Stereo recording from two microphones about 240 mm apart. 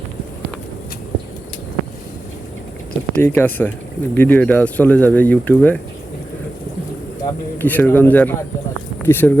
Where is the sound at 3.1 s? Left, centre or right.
Centre.